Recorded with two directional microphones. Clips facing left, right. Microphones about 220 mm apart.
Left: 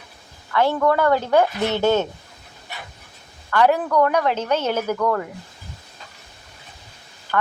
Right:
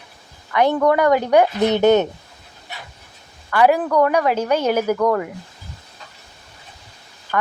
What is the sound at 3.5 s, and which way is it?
Speech, 10° right (ahead or behind).